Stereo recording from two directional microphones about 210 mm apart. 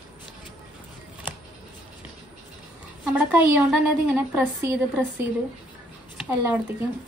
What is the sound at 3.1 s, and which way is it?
A woman's voice, 5° right (ahead or behind).